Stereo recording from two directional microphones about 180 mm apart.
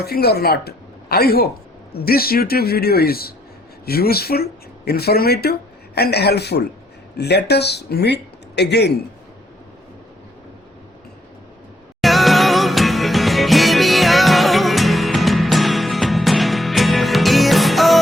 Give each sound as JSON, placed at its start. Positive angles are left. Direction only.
{"t": 0.0, "sound": "speech", "side_deg": 60}
{"t": 12.0, "sound": "music", "side_deg": 0}